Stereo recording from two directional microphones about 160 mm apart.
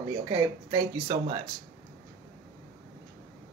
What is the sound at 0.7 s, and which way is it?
Speech, 30° right (ahead or behind).